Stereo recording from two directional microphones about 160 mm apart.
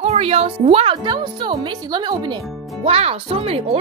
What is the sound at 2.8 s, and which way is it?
Speech, 40° right (ahead or behind).